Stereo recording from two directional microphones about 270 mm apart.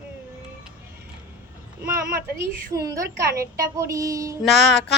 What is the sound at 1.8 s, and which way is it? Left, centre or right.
Speech, right.